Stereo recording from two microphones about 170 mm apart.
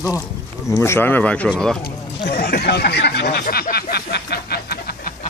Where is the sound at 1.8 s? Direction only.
65° left (ahead or behind).